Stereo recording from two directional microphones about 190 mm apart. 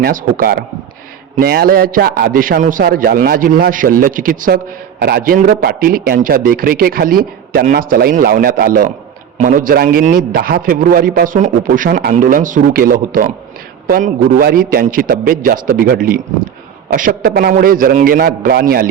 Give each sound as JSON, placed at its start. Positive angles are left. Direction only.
{"t": 0.0, "sound": "a man's voice", "side_deg": -50}